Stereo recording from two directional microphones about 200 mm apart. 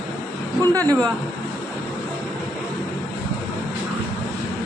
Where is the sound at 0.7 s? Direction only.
20° right (ahead or behind).